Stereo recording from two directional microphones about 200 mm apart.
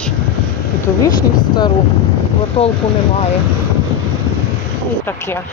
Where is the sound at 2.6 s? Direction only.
30° left (ahead or behind).